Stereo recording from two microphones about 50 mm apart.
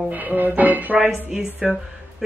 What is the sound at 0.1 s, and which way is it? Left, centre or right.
Music, right.